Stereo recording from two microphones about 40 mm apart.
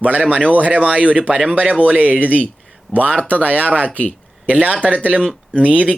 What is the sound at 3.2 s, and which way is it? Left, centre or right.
Speech, right.